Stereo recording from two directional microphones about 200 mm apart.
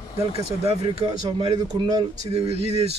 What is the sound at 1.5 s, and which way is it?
Speech, 20° right (ahead or behind).